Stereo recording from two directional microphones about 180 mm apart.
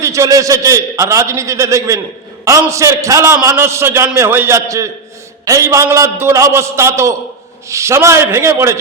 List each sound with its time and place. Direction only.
0.0 s a man's voice: 15° right (ahead or behind)